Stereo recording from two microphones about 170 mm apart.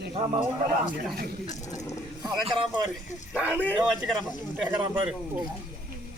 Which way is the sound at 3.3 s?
10° right (ahead or behind).